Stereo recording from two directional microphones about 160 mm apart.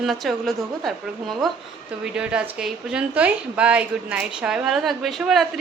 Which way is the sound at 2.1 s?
5° right (ahead or behind).